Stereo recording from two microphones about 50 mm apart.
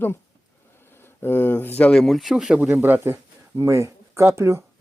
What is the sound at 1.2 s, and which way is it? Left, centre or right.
Speech, left.